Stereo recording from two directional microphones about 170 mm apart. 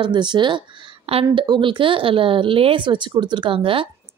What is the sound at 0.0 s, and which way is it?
A woman's voice, 25° right (ahead or behind).